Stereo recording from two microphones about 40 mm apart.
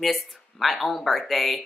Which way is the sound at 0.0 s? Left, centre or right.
Centre.